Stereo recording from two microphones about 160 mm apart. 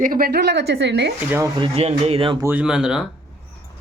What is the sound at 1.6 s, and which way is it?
Speech, 40° right (ahead or behind).